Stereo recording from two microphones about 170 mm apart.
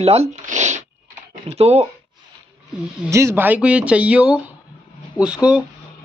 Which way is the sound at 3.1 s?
15° right (ahead or behind).